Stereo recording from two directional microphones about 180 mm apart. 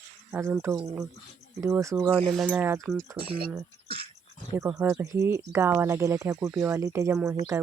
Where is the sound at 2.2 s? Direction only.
5° left (ahead or behind).